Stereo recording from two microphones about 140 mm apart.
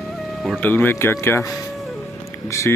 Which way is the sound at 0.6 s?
15° left (ahead or behind).